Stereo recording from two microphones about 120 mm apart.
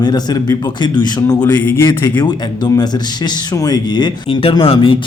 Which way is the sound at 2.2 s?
35° left (ahead or behind).